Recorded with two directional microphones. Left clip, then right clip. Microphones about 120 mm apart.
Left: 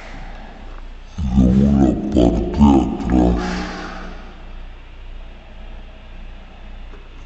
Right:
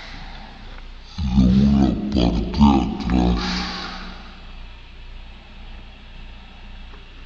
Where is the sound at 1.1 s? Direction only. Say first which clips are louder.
Left 2 dB; 20° left (ahead or behind).